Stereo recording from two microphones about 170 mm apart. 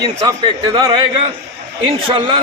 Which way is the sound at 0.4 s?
30° right (ahead or behind).